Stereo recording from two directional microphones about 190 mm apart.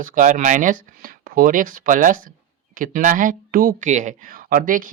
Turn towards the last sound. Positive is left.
turn(degrees=-50)  # may be behind; listen again after turning